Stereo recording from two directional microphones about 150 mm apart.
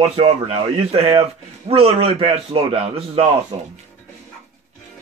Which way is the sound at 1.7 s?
40° right (ahead or behind).